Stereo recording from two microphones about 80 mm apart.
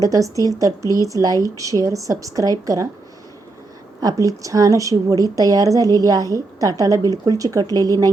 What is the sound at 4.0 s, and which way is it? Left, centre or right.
A woman's voice, right.